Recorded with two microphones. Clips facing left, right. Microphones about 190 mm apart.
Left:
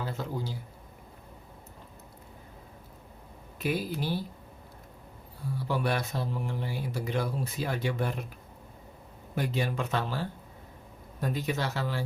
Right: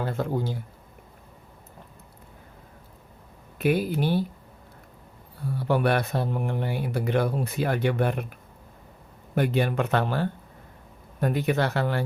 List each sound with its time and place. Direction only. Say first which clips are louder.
0.0 s speech: right 7 dB; 55° right (ahead or behind)
3.6 s speech: right 7 dB; 60° right (ahead or behind)
5.5 s speech: right 6 dB; 60° right (ahead or behind)
9.3 s speech: right 7 dB; 60° right (ahead or behind)